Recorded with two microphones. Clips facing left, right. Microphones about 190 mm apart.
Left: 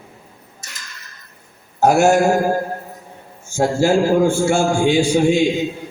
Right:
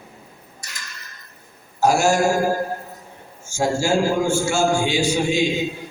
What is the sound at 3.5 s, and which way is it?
A man's voice, 60° left (ahead or behind).